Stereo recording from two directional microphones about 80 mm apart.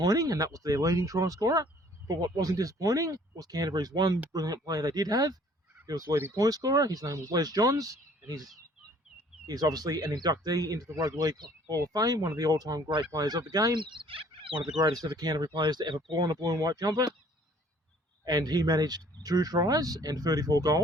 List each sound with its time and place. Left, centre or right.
0.0 s speech: right
9.5 s speech: right
13.7 s fowl: right
14.8 s speech: right
16.1 s speech: right
18.3 s speech: right